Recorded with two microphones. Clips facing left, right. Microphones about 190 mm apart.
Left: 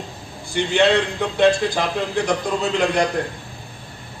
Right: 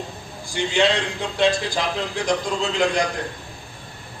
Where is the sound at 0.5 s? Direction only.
60° left (ahead or behind).